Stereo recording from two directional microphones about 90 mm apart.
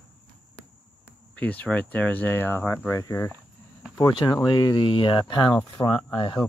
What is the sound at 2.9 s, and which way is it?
Speech, 40° left (ahead or behind).